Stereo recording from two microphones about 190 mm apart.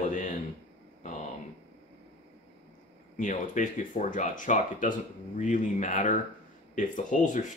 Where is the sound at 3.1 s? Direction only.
40° left (ahead or behind).